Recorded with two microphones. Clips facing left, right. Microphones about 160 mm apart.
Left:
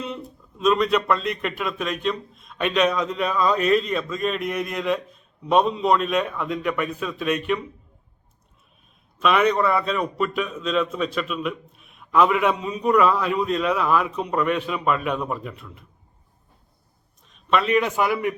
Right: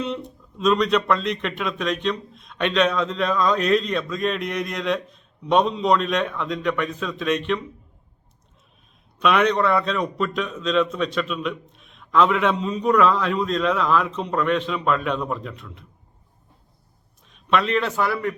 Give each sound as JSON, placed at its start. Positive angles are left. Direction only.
{"t": 0.0, "sound": "speech", "side_deg": 5}
{"t": 9.1, "sound": "speech", "side_deg": 0}
{"t": 17.2, "sound": "a sound", "side_deg": 0}
{"t": 17.7, "sound": "a man's voice", "side_deg": 15}